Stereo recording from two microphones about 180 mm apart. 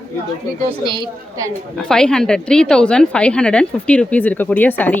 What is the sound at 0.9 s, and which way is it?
Speech, 25° right (ahead or behind).